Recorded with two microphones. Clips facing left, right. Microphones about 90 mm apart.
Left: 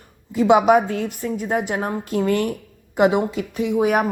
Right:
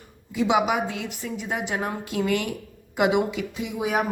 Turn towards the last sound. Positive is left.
turn(degrees=55)  # may be behind; listen again after turning